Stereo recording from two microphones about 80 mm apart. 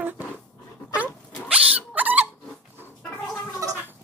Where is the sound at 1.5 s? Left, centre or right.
Centre.